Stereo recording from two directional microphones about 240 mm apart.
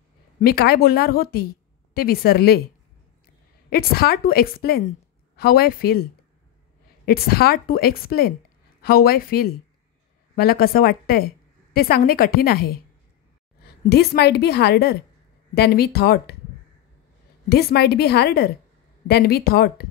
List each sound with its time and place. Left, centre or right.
0.4 s a woman's voice: left
3.7 s a woman's voice: left
7.1 s a woman's voice: left
13.8 s a woman's voice: left
17.5 s a woman's voice: left